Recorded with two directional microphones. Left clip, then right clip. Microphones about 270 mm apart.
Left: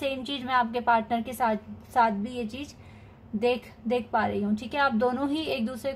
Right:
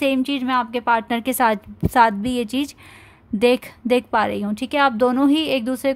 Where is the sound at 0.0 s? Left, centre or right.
Right.